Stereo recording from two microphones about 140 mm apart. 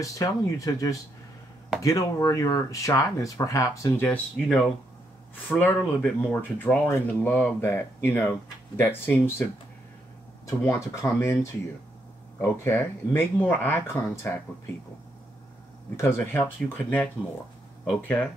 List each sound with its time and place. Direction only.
0.0 s speech: 25° left (ahead or behind)
4.5 s speech: centre (ahead or behind)
5.5 s speech: 15° left (ahead or behind)
10.4 s speech: 20° left (ahead or behind)
12.4 s speech: 20° left (ahead or behind)
16.0 s speech: 20° left (ahead or behind)